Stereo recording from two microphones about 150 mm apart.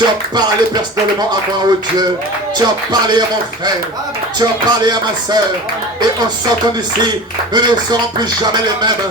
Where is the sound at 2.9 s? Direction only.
30° right (ahead or behind).